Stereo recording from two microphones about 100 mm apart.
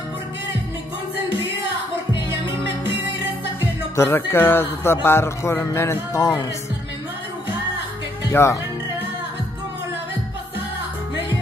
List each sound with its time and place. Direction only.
3.9 s music: 25° left (ahead or behind)
8.3 s speech: 25° left (ahead or behind)